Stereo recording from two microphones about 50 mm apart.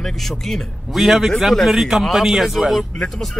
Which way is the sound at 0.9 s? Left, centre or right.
Centre.